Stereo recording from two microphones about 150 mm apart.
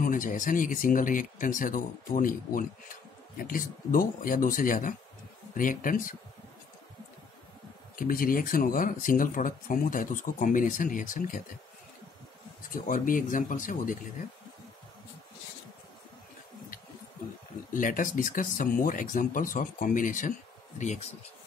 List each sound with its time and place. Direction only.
0.0 s speech: 60° left (ahead or behind)
7.9 s speech: 70° left (ahead or behind)
12.6 s speech: 65° left (ahead or behind)
17.7 s speech: 65° left (ahead or behind)